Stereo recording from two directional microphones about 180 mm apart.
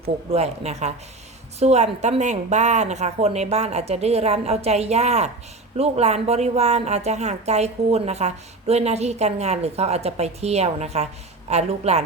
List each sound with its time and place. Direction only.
0.3 s speech: 35° right (ahead or behind)